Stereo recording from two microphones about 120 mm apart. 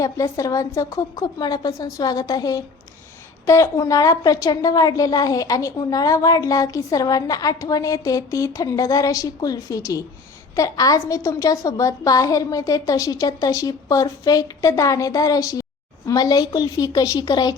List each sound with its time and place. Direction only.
0.0 s a woman's voice: 30° left (ahead or behind)